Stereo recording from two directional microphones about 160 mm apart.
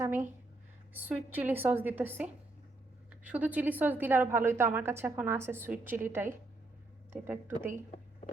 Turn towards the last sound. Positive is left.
turn(degrees=-15)  # may be behind; listen again after turning